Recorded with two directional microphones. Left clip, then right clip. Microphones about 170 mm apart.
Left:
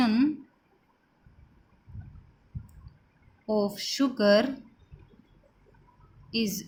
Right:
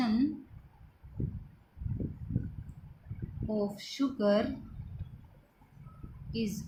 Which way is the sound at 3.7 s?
55° left (ahead or behind).